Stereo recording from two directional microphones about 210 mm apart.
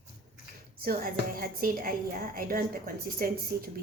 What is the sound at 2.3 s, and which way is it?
A woman's voice, 45° right (ahead or behind).